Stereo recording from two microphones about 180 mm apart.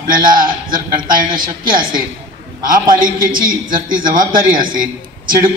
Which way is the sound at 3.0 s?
50° right (ahead or behind).